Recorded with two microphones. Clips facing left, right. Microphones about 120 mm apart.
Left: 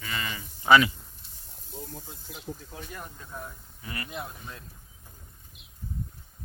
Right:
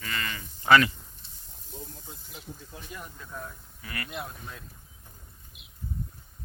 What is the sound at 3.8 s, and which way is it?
Speech, 25° left (ahead or behind).